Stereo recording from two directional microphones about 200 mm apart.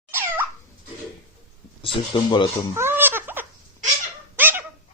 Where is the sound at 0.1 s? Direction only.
10° right (ahead or behind).